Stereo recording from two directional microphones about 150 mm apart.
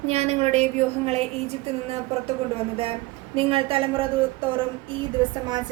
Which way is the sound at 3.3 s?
40° right (ahead or behind).